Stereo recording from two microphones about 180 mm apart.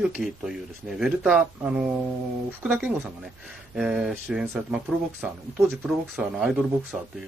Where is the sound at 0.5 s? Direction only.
5° right (ahead or behind).